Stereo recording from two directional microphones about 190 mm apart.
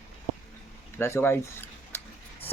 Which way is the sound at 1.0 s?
15° left (ahead or behind).